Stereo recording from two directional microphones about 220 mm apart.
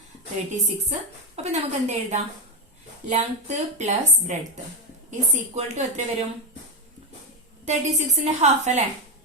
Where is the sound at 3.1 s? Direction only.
30° right (ahead or behind).